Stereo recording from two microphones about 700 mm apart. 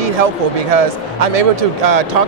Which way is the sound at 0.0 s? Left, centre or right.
Right.